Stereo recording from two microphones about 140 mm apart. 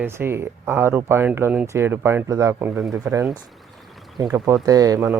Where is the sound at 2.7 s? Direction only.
Centre (ahead or behind).